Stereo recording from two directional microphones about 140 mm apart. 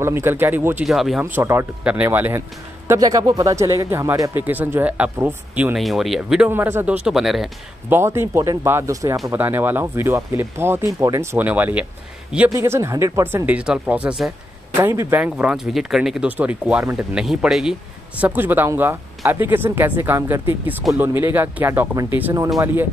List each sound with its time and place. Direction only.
0.0 s speech: 15° right (ahead or behind)
0.8 s speech: centre (ahead or behind)
1.2 s speech: 20° right (ahead or behind)
5.8 s speech: centre (ahead or behind)
6.5 s speech: 15° right (ahead or behind)
7.1 s speech: centre (ahead or behind)
7.9 s speech: 15° right (ahead or behind)
14.8 s speech: 15° right (ahead or behind)
18.2 s speech: 15° right (ahead or behind)